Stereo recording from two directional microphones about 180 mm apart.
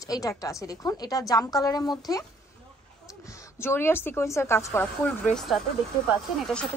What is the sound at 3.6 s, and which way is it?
Speech, 15° left (ahead or behind).